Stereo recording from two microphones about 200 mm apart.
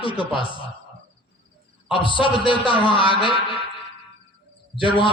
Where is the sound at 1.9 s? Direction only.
25° left (ahead or behind).